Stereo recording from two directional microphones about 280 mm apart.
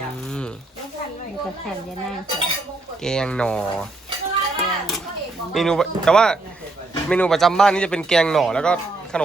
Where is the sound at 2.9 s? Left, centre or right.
Centre.